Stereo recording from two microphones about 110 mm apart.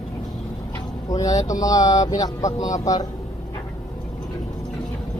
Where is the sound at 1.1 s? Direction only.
35° left (ahead or behind).